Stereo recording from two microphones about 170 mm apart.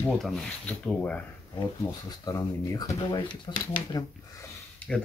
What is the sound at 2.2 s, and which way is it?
Speech, 20° left (ahead or behind).